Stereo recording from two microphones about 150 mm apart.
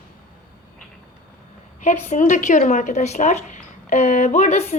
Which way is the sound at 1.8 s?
50° left (ahead or behind).